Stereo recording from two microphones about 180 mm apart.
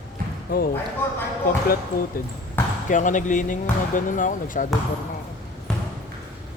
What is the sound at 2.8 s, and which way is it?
Speech, 45° left (ahead or behind).